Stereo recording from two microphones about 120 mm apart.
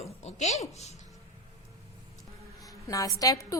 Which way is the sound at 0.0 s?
70° left (ahead or behind).